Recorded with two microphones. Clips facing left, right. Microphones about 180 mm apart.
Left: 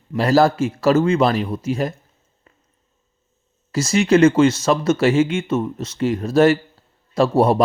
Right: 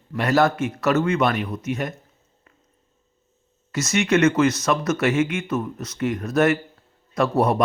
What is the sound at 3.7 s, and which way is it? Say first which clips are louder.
Speech: left 5 dB; 30° left (ahead or behind).